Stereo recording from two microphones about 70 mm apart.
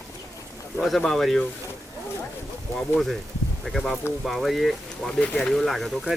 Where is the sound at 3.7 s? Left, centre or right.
Centre.